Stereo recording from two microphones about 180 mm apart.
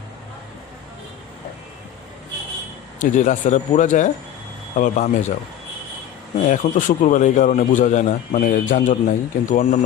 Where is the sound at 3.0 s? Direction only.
45° left (ahead or behind).